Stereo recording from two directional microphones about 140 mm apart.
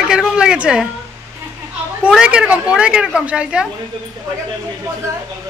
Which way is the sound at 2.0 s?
5° right (ahead or behind).